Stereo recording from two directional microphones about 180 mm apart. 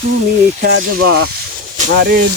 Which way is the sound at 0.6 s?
60° right (ahead or behind).